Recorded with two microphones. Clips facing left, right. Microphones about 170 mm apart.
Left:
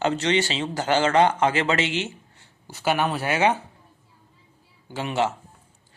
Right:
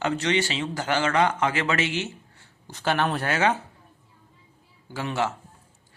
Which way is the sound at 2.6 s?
10° left (ahead or behind).